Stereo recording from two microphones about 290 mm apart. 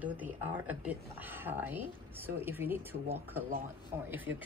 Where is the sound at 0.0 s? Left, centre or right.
Centre.